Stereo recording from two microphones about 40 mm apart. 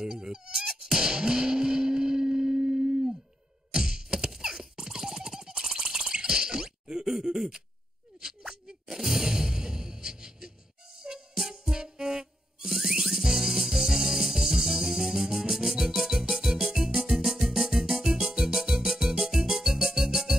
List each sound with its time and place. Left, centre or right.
0.0 s music: centre
7.1 s groan: centre
8.2 s a sound: centre
11.0 s music: centre